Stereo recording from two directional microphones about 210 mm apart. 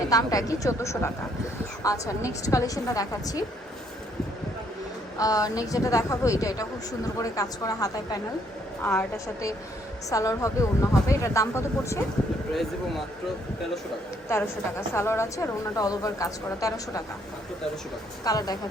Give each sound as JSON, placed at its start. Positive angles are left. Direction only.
{"t": 0.1, "sound": "a woman's voice", "side_deg": 15}
{"t": 5.1, "sound": "a woman's voice", "side_deg": 15}
{"t": 14.3, "sound": "a woman's voice", "side_deg": 10}
{"t": 18.3, "sound": "a woman's voice", "side_deg": 15}